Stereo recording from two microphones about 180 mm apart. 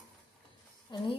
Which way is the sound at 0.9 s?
25° left (ahead or behind).